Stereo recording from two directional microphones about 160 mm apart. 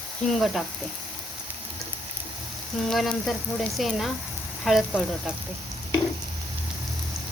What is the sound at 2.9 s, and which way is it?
Speech, centre (ahead or behind).